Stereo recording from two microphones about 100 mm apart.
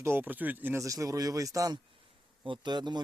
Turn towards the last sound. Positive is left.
turn(degrees=-50)  # may be behind; listen again after turning